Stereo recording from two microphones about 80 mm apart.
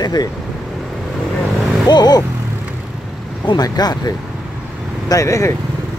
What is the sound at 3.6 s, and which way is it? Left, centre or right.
Speech, left.